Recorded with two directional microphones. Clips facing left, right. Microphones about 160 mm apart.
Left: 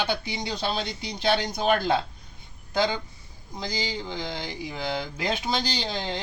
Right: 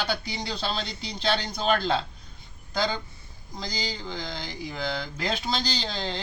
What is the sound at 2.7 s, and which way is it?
Speech, 20° left (ahead or behind).